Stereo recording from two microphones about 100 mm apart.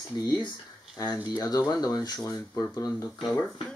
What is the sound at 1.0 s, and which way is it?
Speech, 40° left (ahead or behind).